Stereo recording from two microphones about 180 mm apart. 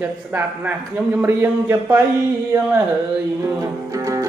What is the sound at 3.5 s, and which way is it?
Speech, 20° right (ahead or behind).